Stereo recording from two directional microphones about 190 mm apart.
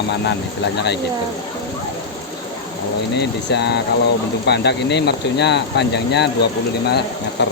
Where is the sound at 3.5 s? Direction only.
60° left (ahead or behind).